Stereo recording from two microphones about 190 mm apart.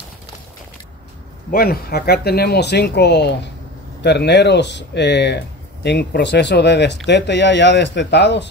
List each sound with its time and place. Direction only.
1.5 s speech: 50° left (ahead or behind)